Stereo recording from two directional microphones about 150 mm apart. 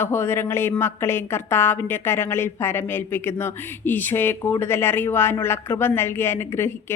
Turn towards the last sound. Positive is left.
turn(degrees=15)  # may be behind; listen again after turning